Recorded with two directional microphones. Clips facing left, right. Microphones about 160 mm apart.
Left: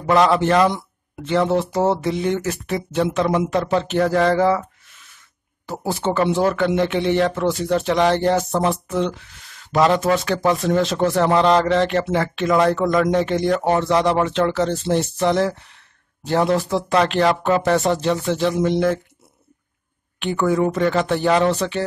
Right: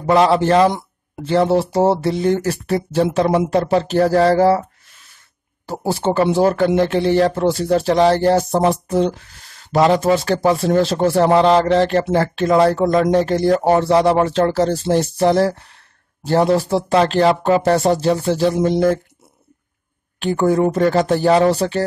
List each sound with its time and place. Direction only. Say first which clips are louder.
0.0 s speech: right 2 dB; 30° right (ahead or behind)
5.7 s speech: right 3 dB; 35° right (ahead or behind)
20.2 s speech: right 3 dB; 35° right (ahead or behind)